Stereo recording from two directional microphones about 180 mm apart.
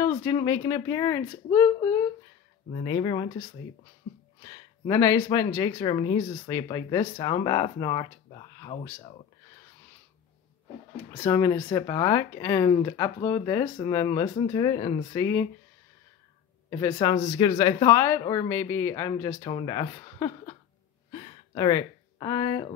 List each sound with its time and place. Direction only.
0.0 s speech: 15° left (ahead or behind)
2.7 s speech: 30° left (ahead or behind)
4.4 s speech: 20° left (ahead or behind)
11.2 s speech: 15° left (ahead or behind)
16.7 s speech: 20° left (ahead or behind)
21.1 s a sound: 25° left (ahead or behind)